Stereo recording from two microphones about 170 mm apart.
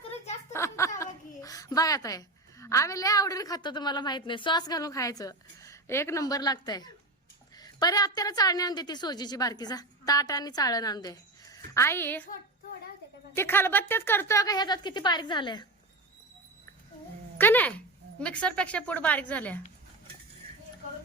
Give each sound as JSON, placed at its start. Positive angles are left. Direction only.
{"t": 0.5, "sound": "a woman's voice", "side_deg": 15}
{"t": 13.3, "sound": "a woman's voice", "side_deg": 15}
{"t": 17.3, "sound": "speech", "side_deg": 10}